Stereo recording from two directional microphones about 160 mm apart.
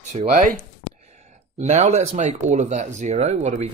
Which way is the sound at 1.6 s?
45° right (ahead or behind).